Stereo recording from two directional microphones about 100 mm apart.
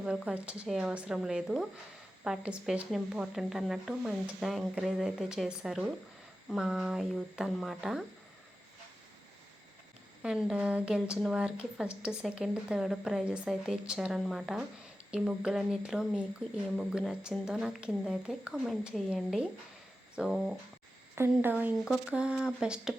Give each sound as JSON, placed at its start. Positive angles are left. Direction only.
{"t": 0.0, "sound": "a woman's voice", "side_deg": -10}
{"t": 10.2, "sound": "a woman's voice", "side_deg": -10}
{"t": 17.4, "sound": "speech", "side_deg": -5}
{"t": 21.2, "sound": "speech", "side_deg": -20}